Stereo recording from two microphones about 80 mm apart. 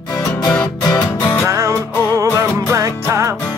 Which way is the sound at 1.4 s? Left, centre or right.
Right.